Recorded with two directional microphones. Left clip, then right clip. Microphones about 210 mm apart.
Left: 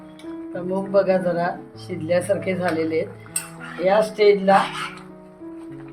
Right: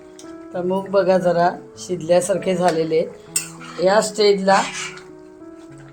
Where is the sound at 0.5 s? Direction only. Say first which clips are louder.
Right 2 dB; 35° right (ahead or behind).